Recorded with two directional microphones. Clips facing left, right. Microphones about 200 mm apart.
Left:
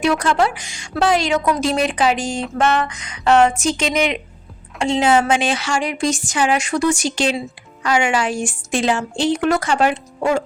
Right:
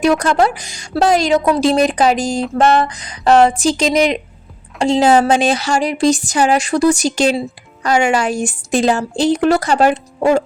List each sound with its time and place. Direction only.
0.0 s a woman's voice: 40° right (ahead or behind)